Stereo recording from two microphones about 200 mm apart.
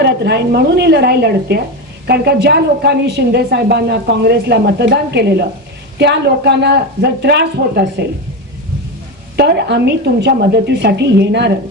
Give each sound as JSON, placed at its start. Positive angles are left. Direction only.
{"t": 0.0, "sound": "a woman's voice", "side_deg": -55}
{"t": 9.3, "sound": "a woman's voice", "side_deg": -55}